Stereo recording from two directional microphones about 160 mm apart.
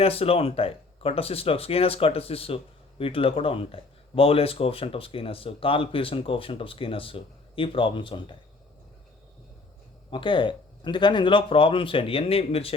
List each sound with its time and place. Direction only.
0.0 s speech: 35° left (ahead or behind)
10.1 s speech: 30° left (ahead or behind)